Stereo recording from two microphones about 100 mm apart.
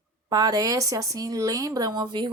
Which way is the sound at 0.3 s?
40° right (ahead or behind).